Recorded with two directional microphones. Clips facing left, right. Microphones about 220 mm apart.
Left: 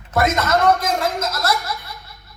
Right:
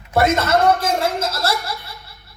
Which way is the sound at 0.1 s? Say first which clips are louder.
Right 2 dB; 30° right (ahead or behind).